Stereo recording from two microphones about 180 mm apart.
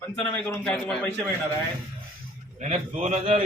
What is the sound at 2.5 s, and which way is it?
Speech, 40° right (ahead or behind).